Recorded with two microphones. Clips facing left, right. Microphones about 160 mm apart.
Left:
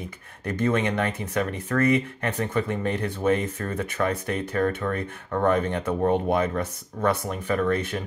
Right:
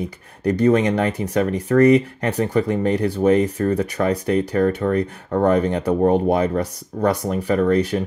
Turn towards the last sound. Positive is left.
turn(degrees=-35)  # may be behind; listen again after turning